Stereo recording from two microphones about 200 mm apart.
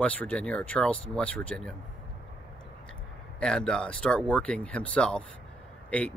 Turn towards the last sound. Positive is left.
turn(degrees=5)  # may be behind; listen again after turning